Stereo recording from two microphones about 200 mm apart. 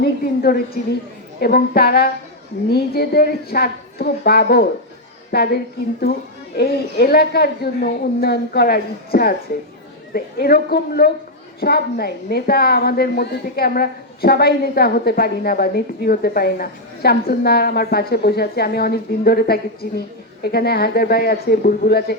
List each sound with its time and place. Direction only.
0.0 s a woman's voice: 50° left (ahead or behind)
6.6 s a woman's voice: 50° left (ahead or behind)